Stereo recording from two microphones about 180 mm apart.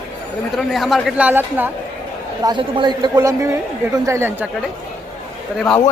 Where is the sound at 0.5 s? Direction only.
Centre (ahead or behind).